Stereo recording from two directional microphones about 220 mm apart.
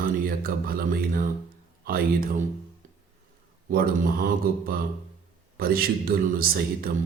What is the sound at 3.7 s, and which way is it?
Speech, 40° right (ahead or behind).